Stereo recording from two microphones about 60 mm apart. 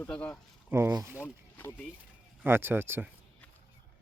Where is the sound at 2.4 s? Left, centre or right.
Right.